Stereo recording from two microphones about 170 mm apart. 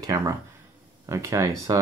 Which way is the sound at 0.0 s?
20° right (ahead or behind).